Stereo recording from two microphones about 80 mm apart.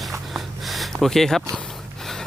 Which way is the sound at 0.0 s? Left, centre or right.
Centre.